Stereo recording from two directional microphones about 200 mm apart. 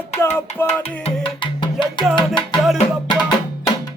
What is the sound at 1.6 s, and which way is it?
Music, 25° left (ahead or behind).